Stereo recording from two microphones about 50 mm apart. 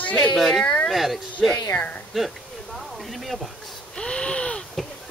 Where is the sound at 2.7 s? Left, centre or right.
Centre.